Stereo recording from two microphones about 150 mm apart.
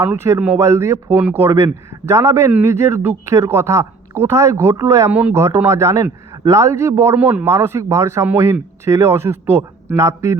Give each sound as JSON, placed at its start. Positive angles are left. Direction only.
{"t": 0.0, "sound": "a man's voice", "side_deg": -15}